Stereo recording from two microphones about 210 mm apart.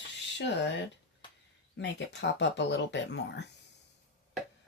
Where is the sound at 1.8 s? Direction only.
55° left (ahead or behind).